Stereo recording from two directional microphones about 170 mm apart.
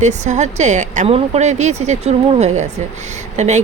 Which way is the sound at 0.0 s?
45° right (ahead or behind).